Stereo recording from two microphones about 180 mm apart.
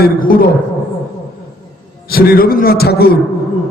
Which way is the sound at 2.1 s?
55° left (ahead or behind).